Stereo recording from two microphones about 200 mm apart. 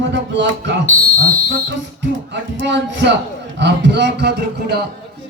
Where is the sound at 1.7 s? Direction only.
65° right (ahead or behind).